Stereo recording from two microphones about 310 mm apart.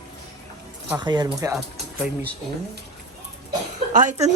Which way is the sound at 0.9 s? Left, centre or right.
Centre.